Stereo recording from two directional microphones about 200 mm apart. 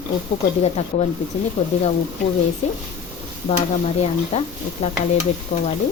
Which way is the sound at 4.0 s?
35° left (ahead or behind).